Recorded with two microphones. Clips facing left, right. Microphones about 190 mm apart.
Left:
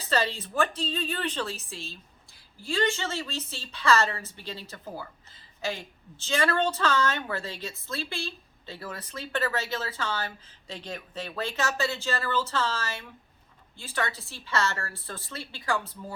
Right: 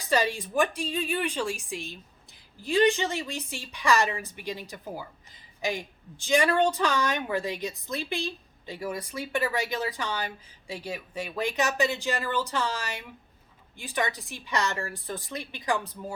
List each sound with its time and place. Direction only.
0.0 s a woman's voice: 15° right (ahead or behind)